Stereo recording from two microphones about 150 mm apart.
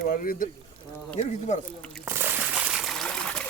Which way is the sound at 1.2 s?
50° left (ahead or behind).